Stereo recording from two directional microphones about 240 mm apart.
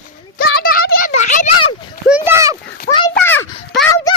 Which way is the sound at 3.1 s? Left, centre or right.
Centre.